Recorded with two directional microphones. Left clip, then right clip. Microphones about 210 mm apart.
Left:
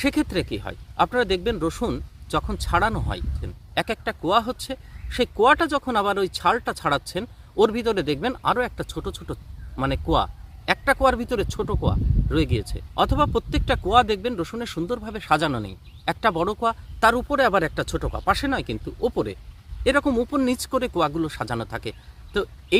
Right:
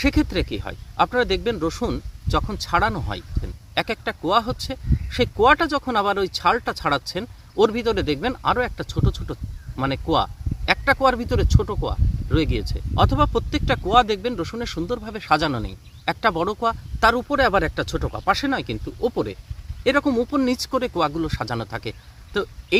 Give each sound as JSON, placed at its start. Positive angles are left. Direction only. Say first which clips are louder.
{"t": 0.0, "sound": "speech", "louder": "right 2 dB", "side_deg": 10}